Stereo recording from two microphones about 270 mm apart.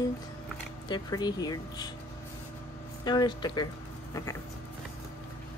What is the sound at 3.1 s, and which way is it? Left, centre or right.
Speech, centre.